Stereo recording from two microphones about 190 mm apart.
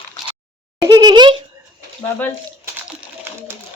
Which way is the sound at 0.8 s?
20° right (ahead or behind).